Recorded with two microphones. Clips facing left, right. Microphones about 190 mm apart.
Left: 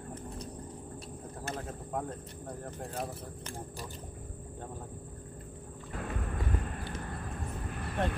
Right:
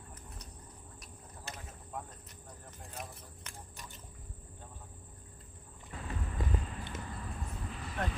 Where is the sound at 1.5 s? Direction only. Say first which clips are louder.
Left 10 dB; 55° left (ahead or behind).